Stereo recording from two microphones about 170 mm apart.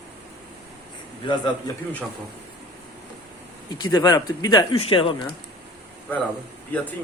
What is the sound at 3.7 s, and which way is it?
Speech, 25° left (ahead or behind).